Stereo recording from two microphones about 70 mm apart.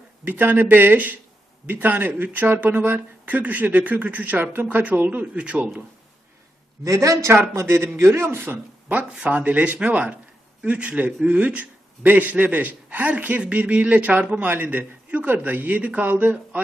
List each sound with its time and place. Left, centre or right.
0.3 s a man's voice: right
6.8 s a man's voice: right
8.9 s a man's voice: centre